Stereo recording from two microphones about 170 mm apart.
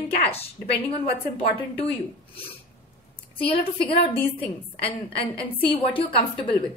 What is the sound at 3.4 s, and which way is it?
A woman's voice, 30° left (ahead or behind).